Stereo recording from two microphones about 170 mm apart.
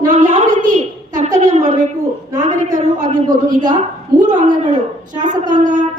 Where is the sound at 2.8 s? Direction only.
45° right (ahead or behind).